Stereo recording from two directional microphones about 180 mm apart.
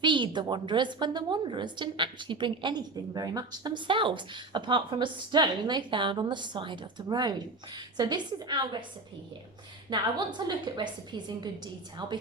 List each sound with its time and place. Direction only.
0.0 s a woman's voice: 25° right (ahead or behind)
9.9 s a woman's voice: 25° right (ahead or behind)